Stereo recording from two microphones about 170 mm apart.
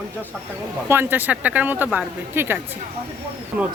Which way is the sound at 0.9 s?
10° right (ahead or behind).